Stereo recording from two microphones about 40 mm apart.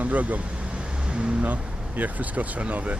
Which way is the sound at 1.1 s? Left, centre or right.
Right.